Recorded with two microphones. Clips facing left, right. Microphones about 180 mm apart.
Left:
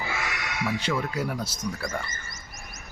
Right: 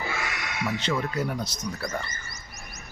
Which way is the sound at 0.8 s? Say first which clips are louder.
Even; 10° left (ahead or behind).